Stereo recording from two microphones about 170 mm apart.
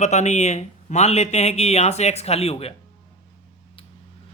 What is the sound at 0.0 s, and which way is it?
Speech, 40° left (ahead or behind).